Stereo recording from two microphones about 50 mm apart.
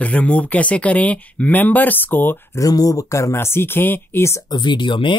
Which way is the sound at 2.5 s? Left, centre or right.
Left.